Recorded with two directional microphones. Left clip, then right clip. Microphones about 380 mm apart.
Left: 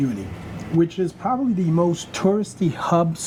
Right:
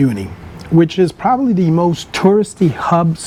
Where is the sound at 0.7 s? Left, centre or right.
Right.